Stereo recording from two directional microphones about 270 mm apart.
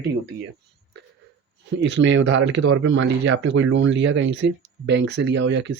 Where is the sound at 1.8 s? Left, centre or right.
Right.